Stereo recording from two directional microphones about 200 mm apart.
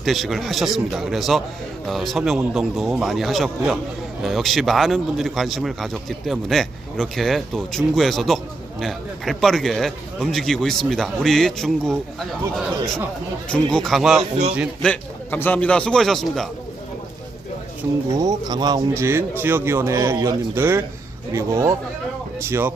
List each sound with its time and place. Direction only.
0.0 s speech: centre (ahead or behind)
14.8 s speech: 10° left (ahead or behind)
18.1 s a man's voice: 15° right (ahead or behind)